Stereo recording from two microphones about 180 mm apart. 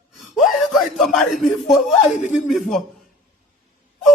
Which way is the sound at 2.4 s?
Centre (ahead or behind).